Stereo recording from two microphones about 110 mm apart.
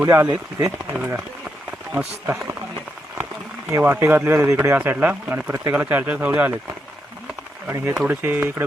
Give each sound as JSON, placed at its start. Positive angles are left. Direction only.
{"t": 0.0, "sound": "speech", "side_deg": -25}
{"t": 0.9, "sound": "speech", "side_deg": -15}
{"t": 3.7, "sound": "speech", "side_deg": -25}
{"t": 7.7, "sound": "speech", "side_deg": -20}